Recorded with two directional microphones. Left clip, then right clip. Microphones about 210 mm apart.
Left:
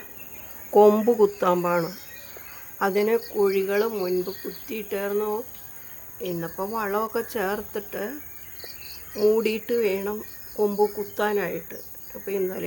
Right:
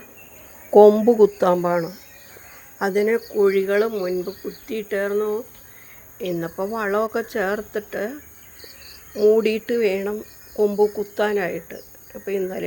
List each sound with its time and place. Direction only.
1.0 s speech: 10° right (ahead or behind)
6.1 s speech: 15° right (ahead or behind)
9.1 s speech: 5° right (ahead or behind)